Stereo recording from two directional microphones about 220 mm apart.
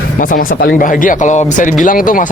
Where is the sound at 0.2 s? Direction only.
40° left (ahead or behind).